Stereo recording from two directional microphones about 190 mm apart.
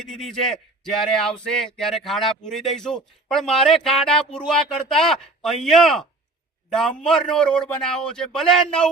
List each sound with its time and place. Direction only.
0.0 s speech: centre (ahead or behind)